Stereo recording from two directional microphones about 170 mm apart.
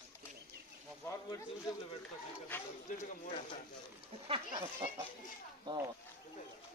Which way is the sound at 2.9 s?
50° left (ahead or behind).